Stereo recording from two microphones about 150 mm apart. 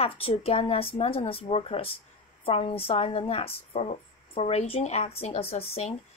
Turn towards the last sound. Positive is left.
turn(degrees=45)  # may be behind; listen again after turning